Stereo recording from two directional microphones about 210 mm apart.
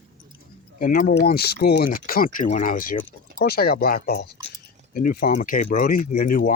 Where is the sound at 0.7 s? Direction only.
40° left (ahead or behind).